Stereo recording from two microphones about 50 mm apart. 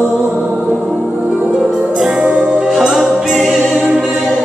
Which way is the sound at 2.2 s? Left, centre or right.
Centre.